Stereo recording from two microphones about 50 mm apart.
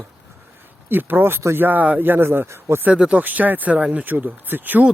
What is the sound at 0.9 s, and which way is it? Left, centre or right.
Speech, right.